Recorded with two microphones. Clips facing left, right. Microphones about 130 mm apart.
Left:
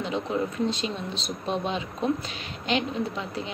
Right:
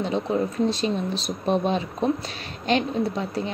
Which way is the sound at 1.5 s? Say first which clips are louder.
Right 6 dB; 40° right (ahead or behind).